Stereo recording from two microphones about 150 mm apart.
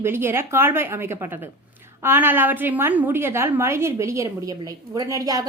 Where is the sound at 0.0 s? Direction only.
15° right (ahead or behind).